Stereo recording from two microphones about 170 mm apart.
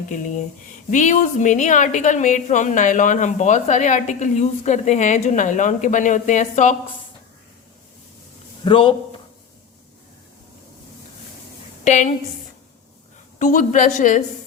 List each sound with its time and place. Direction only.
0.9 s a woman's voice: 45° left (ahead or behind)
8.6 s a man's voice: 30° left (ahead or behind)
11.9 s a woman's voice: 45° left (ahead or behind)
13.4 s a woman's voice: 50° left (ahead or behind)